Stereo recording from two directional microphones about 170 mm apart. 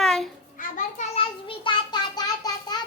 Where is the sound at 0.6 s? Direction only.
50° left (ahead or behind).